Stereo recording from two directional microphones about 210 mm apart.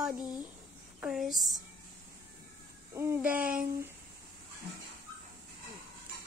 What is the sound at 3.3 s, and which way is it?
Speech, 45° right (ahead or behind).